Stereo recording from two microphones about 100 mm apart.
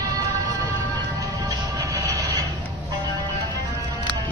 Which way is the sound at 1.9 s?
35° right (ahead or behind).